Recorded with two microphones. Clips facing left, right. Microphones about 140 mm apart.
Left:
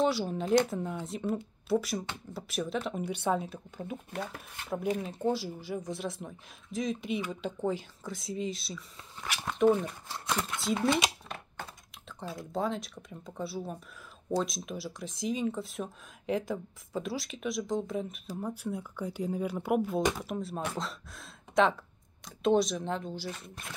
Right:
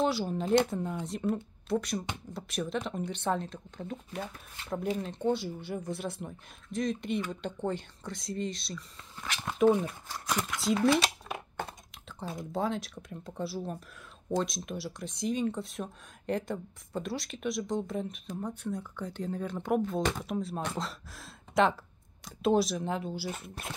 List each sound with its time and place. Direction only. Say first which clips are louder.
0.0 s speech: left 1 dB; centre (ahead or behind)
10.0 s speech: even; 25° left (ahead or behind)
10.6 s speech: right 4 dB; centre (ahead or behind)
12.5 s speech: even; centre (ahead or behind)